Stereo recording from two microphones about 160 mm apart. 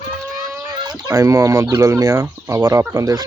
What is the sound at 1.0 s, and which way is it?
Speech, 20° right (ahead or behind).